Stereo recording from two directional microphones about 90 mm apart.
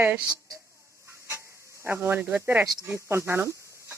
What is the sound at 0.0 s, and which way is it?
Speech, 20° right (ahead or behind).